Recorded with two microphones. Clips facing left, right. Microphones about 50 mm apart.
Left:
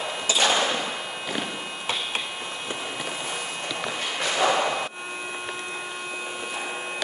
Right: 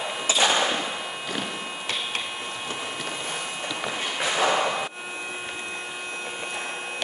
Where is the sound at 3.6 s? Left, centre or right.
Centre.